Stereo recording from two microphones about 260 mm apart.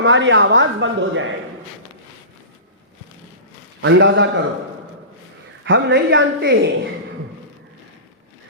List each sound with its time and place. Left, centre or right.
0.0 s speech: right
3.8 s speech: right
5.6 s speech: right